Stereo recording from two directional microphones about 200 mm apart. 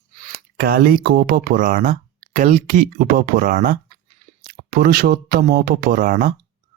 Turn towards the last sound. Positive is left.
turn(degrees=-45)  # may be behind; listen again after turning